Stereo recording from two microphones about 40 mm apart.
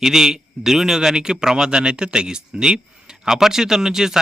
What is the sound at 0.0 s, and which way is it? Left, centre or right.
Speech, centre.